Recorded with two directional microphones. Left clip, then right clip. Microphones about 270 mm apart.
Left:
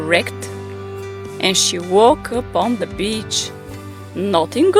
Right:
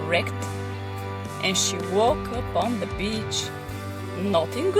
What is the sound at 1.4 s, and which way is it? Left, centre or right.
Speech, left.